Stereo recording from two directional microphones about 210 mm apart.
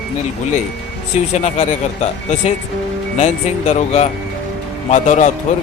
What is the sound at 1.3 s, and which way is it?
Speech, 35° left (ahead or behind).